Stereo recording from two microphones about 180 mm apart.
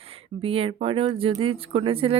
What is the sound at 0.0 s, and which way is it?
A woman's voice, 35° right (ahead or behind).